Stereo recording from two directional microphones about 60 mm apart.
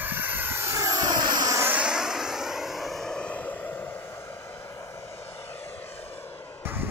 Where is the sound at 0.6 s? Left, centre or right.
Right.